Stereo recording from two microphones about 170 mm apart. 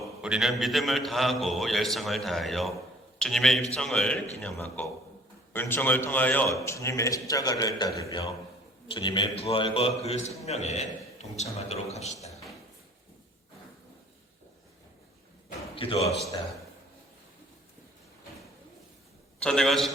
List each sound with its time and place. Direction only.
0.0 s a man's voice: 5° right (ahead or behind); by 12.3 s 40° left (ahead or behind)
15.7 s a man's voice: 35° left (ahead or behind)
19.4 s a man's voice: 5° left (ahead or behind)